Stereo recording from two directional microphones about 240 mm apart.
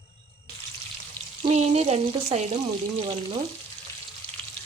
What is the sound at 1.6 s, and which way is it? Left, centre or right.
Frying, right.